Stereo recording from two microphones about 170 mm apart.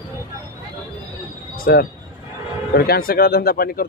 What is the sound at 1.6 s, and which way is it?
Speech, 60° left (ahead or behind).